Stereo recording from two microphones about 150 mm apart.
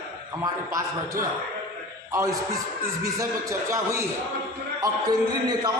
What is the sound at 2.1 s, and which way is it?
A man's voice, 20° right (ahead or behind).